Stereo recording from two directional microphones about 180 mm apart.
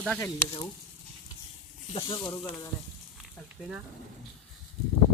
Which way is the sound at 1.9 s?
30° left (ahead or behind).